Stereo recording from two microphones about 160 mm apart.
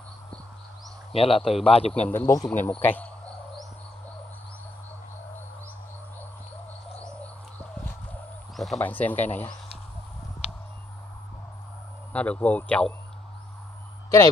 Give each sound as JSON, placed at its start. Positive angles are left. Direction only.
{"t": 1.1, "sound": "speech", "side_deg": 35}
{"t": 2.0, "sound": "a man's voice", "side_deg": 15}
{"t": 2.5, "sound": "insect", "side_deg": 10}
{"t": 7.0, "sound": "bird", "side_deg": 10}
{"t": 8.1, "sound": "a sound", "side_deg": 0}
{"t": 8.7, "sound": "a man's voice", "side_deg": 10}
{"t": 12.1, "sound": "a man's voice", "side_deg": 10}